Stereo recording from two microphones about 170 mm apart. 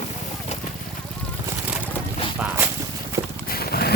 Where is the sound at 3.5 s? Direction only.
65° left (ahead or behind).